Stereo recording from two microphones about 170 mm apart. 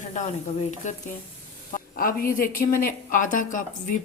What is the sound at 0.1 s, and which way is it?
Speech, 45° left (ahead or behind).